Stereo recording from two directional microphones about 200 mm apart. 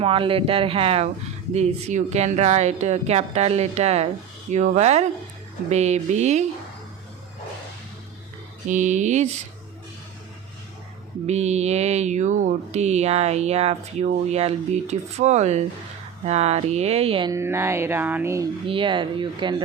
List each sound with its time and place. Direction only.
0.0 s speech: 25° right (ahead or behind)
8.7 s speech: 35° right (ahead or behind)
11.3 s speech: 35° right (ahead or behind)
17.3 s music: 10° right (ahead or behind)
18.6 s speech: 25° right (ahead or behind)